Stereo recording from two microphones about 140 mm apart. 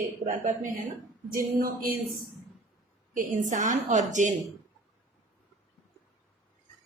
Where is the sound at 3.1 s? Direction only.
65° right (ahead or behind).